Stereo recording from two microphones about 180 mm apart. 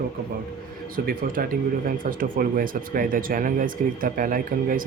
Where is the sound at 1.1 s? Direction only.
50° right (ahead or behind).